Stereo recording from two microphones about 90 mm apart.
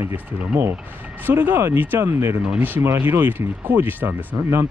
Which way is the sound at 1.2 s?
25° right (ahead or behind).